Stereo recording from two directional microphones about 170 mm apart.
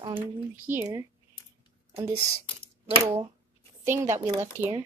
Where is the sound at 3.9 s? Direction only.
15° right (ahead or behind).